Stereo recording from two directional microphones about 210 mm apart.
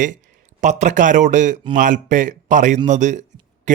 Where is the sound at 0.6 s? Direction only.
35° right (ahead or behind).